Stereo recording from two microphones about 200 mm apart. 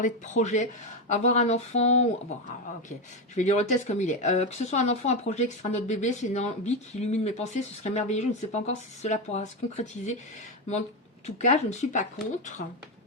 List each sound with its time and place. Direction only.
0.0 s speech: 35° left (ahead or behind)
3.3 s speech: 35° left (ahead or behind)
11.3 s speech: 35° left (ahead or behind)